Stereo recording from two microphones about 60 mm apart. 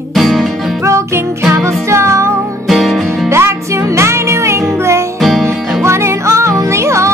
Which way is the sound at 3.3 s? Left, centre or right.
Right.